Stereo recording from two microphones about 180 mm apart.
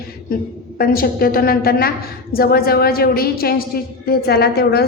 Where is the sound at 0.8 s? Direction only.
55° left (ahead or behind).